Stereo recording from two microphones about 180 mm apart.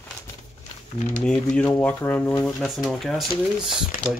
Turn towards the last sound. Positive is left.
turn(degrees=0)  # may be behind; listen again after turning